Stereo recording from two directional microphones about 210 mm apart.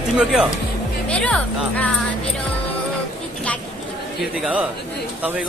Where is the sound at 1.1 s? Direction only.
5° left (ahead or behind).